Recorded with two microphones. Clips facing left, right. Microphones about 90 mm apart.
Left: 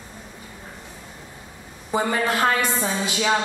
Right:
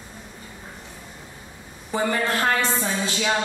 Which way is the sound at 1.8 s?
15° left (ahead or behind).